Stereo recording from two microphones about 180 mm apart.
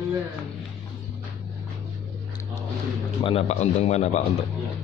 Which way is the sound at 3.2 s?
30° left (ahead or behind).